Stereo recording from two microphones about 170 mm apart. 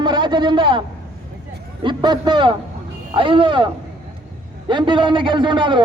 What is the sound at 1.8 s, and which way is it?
A man's voice, 25° right (ahead or behind).